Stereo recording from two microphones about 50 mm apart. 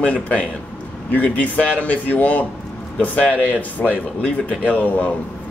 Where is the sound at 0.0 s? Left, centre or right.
Left.